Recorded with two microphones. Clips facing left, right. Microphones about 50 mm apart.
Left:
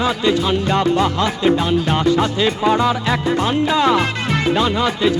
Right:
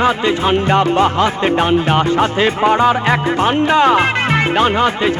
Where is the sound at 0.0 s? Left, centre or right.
Right.